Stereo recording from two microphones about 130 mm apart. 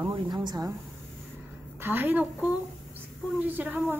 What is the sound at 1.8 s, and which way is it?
A woman's voice, 15° right (ahead or behind).